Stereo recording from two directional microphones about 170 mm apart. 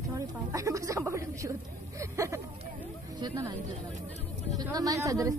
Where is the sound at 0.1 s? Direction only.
20° right (ahead or behind).